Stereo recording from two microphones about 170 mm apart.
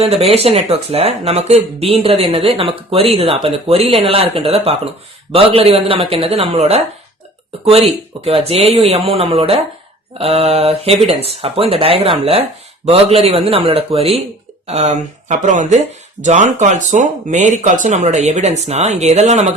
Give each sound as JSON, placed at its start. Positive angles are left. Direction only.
{"t": 0.0, "sound": "speech", "side_deg": -35}